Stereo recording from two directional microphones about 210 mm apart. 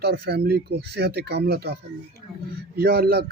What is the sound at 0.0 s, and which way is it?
Speech, 50° right (ahead or behind).